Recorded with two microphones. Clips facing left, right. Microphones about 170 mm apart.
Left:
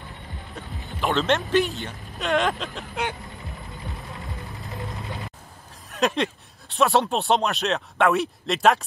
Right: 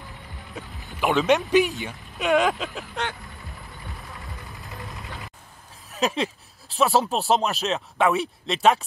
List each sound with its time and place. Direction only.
0.6 s speech: centre (ahead or behind)
2.1 s speech: centre (ahead or behind)
4.6 s vehicle: 20° left (ahead or behind)
5.9 s speech: centre (ahead or behind)